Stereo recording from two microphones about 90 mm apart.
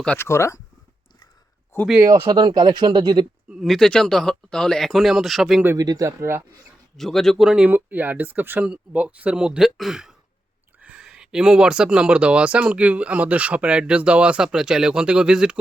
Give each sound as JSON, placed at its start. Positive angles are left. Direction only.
{"t": 0.2, "sound": "speech", "side_deg": 30}
{"t": 2.2, "sound": "speech", "side_deg": -60}
{"t": 3.5, "sound": "speech", "side_deg": 0}
{"t": 5.7, "sound": "speech", "side_deg": -45}
{"t": 6.9, "sound": "speech", "side_deg": 5}